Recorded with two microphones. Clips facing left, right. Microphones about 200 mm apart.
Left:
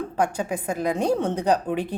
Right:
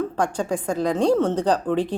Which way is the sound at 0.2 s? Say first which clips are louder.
Left 3 dB; 10° left (ahead or behind).